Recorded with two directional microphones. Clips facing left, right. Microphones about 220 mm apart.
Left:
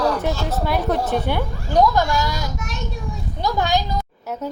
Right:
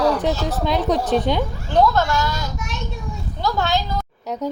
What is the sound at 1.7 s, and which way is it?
Speech, 10° left (ahead or behind).